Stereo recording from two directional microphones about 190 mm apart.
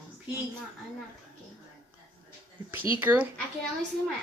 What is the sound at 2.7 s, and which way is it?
Speech, 10° right (ahead or behind).